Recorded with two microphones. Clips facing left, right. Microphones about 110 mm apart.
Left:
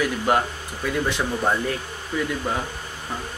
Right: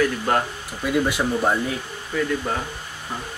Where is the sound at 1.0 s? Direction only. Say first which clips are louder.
Right 2 dB; 10° right (ahead or behind).